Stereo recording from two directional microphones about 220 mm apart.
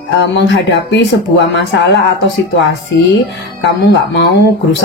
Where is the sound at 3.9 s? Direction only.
55° left (ahead or behind).